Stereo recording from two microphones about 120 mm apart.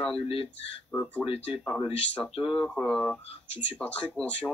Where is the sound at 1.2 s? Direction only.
45° left (ahead or behind).